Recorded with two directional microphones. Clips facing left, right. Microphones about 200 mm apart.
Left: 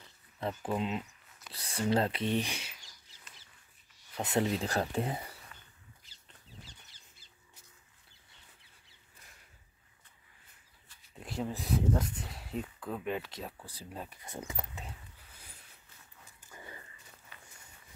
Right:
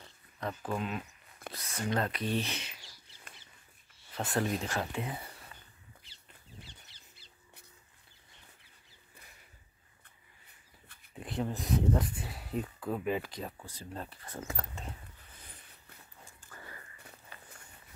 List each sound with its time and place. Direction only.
0.7 s speech: 20° left (ahead or behind)
4.2 s speech: 20° left (ahead or behind)
4.6 s speech: 35° left (ahead or behind)
11.1 s speech: centre (ahead or behind)
16.3 s dog: 15° left (ahead or behind)
17.3 s a sound: 40° right (ahead or behind)